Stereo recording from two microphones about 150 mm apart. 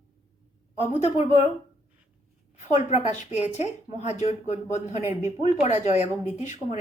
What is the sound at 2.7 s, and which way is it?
A woman's voice, 45° left (ahead or behind).